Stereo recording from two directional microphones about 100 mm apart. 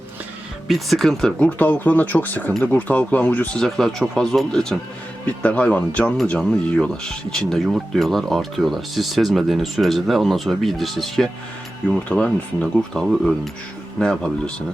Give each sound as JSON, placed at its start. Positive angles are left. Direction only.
{"t": 0.7, "sound": "speech", "side_deg": 0}
{"t": 1.5, "sound": "speech", "side_deg": 15}
{"t": 3.6, "sound": "speech", "side_deg": 5}
{"t": 12.0, "sound": "speech", "side_deg": 10}